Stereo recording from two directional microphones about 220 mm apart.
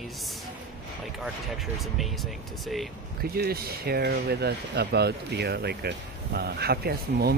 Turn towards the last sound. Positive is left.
turn(degrees=-45)  # may be behind; listen again after turning